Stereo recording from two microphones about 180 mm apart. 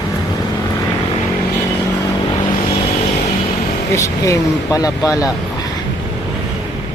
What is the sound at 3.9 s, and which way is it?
Speech, 15° left (ahead or behind).